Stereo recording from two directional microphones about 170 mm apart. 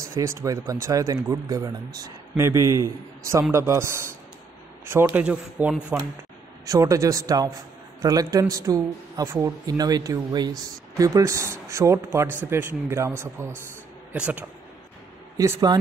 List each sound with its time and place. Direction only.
0.1 s a man's voice: 15° right (ahead or behind)
6.6 s a man's voice: 20° right (ahead or behind)
15.3 s speech: 20° right (ahead or behind)